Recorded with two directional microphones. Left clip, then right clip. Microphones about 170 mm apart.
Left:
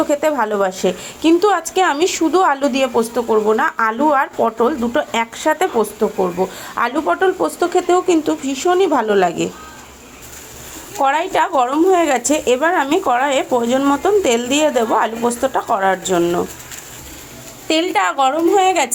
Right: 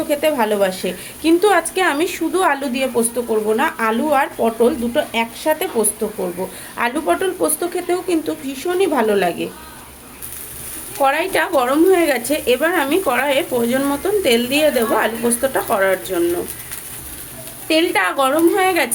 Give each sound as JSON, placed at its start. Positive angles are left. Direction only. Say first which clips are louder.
{"t": 0.1, "sound": "speech", "louder": "left 1 dB", "side_deg": 20}
{"t": 11.0, "sound": "speech", "louder": "left 1 dB", "side_deg": 20}
{"t": 17.7, "sound": "speech", "louder": "even", "side_deg": 25}